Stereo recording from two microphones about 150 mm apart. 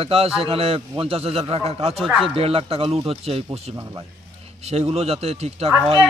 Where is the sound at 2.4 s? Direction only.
40° right (ahead or behind).